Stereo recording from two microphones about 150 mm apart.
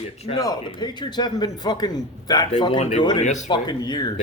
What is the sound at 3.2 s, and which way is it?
Speech, 55° left (ahead or behind).